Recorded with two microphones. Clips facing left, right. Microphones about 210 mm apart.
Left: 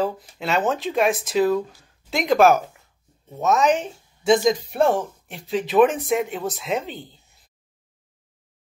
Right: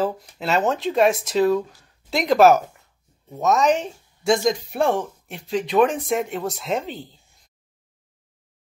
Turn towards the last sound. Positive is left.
turn(degrees=0)  # may be behind; listen again after turning